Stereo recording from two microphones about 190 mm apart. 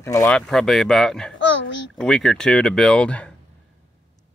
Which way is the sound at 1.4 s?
80° left.